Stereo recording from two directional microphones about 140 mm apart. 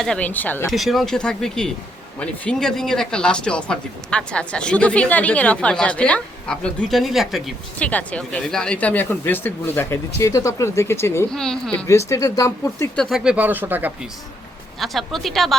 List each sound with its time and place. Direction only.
0.0 s speech: 5° left (ahead or behind)
0.7 s speech: centre (ahead or behind)
7.8 s speech: 10° left (ahead or behind)
11.3 s speech: 5° left (ahead or behind)
11.9 s speech: 20° left (ahead or behind)
13.0 s speech: centre (ahead or behind)
14.8 s speech: centre (ahead or behind)